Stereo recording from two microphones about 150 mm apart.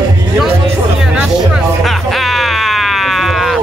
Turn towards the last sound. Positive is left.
turn(degrees=0)  # may be behind; listen again after turning